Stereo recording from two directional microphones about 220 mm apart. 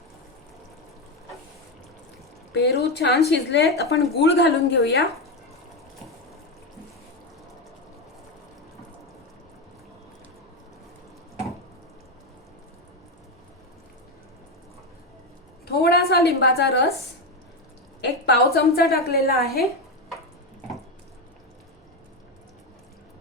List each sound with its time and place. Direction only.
2.5 s speech: 45° left (ahead or behind)
15.6 s a sound: 45° left (ahead or behind)
18.0 s a woman's voice: 50° left (ahead or behind)